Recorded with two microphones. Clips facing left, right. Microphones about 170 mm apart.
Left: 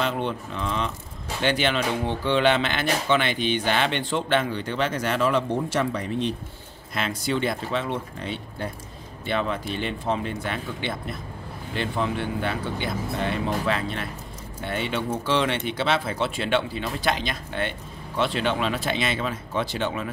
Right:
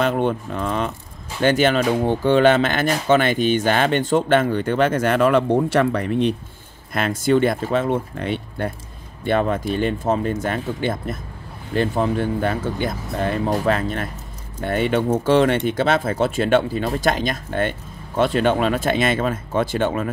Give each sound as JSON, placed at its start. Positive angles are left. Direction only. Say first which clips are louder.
{"t": 0.0, "sound": "speech", "louder": "right 7 dB", "side_deg": -50}
{"t": 9.2, "sound": "speech", "louder": "right 7 dB", "side_deg": -50}